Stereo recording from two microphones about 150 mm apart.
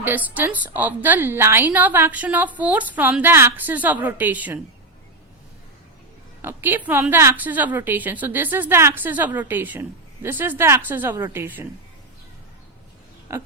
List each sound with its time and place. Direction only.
0.0 s a woman's voice: 10° right (ahead or behind)
6.4 s a woman's voice: 15° right (ahead or behind)
13.3 s a woman's voice: 20° right (ahead or behind)